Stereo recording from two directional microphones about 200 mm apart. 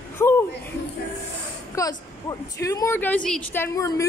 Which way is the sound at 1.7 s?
15° left (ahead or behind).